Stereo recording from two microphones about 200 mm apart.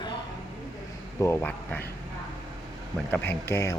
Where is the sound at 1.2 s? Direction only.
10° left (ahead or behind).